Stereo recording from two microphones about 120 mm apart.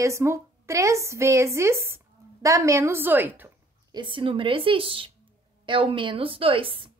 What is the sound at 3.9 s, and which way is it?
A woman's voice, 45° right (ahead or behind).